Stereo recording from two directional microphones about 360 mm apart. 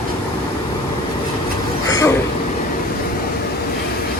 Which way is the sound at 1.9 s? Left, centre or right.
Centre.